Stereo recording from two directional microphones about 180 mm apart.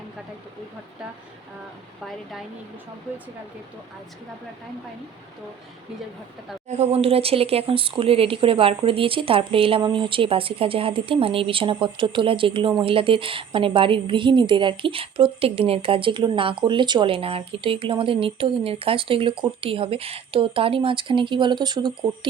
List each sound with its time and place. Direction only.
6.7 s speech: 35° right (ahead or behind)